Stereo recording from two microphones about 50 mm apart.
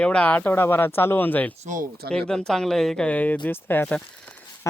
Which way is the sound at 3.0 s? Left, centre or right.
Left.